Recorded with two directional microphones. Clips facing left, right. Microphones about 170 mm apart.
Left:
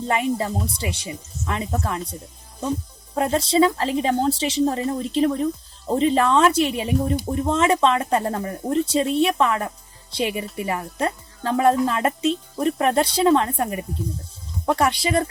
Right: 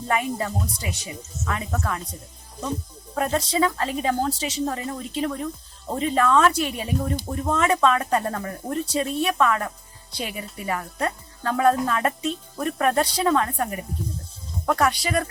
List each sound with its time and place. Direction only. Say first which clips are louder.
0.1 s a woman's voice: left 2 dB; 25° left (ahead or behind)
3.2 s a woman's voice: left 4 dB; 30° left (ahead or behind)